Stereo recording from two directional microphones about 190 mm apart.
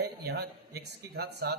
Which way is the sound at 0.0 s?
60° right (ahead or behind).